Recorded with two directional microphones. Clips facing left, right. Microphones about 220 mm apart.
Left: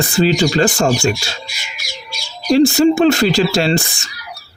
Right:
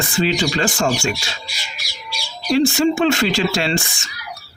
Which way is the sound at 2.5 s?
35° left (ahead or behind).